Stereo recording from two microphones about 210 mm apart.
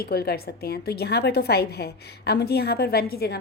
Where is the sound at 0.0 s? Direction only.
50° left (ahead or behind).